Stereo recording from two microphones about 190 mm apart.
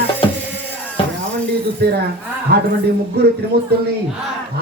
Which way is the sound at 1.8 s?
60° right (ahead or behind).